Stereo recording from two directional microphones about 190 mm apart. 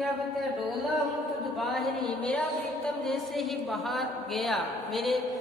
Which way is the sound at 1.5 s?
Centre (ahead or behind).